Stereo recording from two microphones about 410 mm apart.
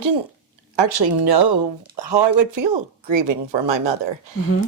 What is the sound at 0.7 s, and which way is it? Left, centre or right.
Speech, right.